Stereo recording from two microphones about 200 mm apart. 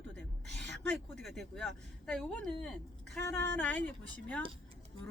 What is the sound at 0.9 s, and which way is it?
A woman's voice, centre (ahead or behind).